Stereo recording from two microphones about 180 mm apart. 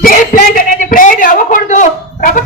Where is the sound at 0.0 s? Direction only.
50° left (ahead or behind).